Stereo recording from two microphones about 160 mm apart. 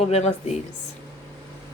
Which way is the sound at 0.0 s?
40° left (ahead or behind).